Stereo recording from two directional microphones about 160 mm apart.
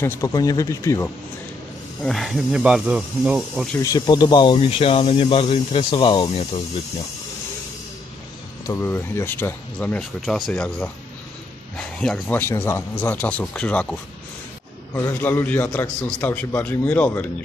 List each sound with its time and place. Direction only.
0.0 s speech: 15° left (ahead or behind)
2.0 s speech: centre (ahead or behind)
3.8 s speech: 25° left (ahead or behind)
8.6 s speech: 15° left (ahead or behind)
15.2 s speech: 10° left (ahead or behind)